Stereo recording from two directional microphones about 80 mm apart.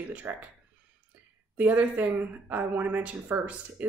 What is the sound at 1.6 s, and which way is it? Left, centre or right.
A woman's voice, centre.